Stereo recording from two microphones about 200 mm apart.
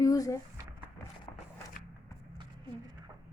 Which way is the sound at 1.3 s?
25° left (ahead or behind).